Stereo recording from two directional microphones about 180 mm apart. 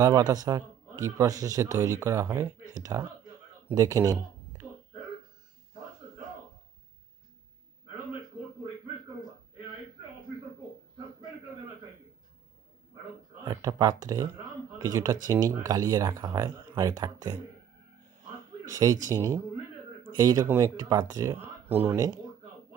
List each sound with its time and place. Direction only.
0.0 s a man's voice: 20° right (ahead or behind)
13.5 s a man's voice: 20° right (ahead or behind)
18.7 s a man's voice: 20° right (ahead or behind)
20.2 s a man's voice: 20° right (ahead or behind)